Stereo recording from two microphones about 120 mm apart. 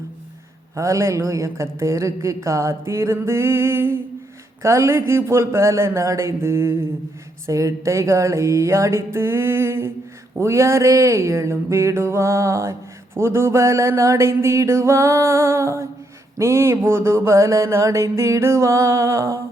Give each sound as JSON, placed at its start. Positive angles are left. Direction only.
{"t": 0.8, "sound": "a woman's voice", "side_deg": -25}